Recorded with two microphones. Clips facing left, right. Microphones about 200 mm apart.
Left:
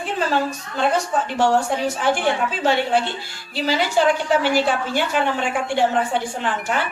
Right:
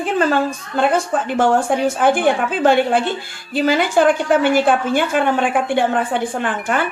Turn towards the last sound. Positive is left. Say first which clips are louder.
# right 3 dB
turn(degrees=-50)  # may be behind; listen again after turning